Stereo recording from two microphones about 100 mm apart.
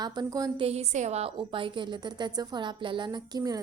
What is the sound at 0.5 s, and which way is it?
Speech, 80° right.